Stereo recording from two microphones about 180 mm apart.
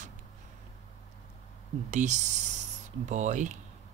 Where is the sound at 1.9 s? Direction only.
40° right (ahead or behind).